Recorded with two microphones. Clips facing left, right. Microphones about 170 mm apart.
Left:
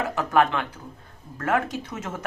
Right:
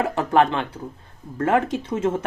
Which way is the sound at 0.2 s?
30° right (ahead or behind).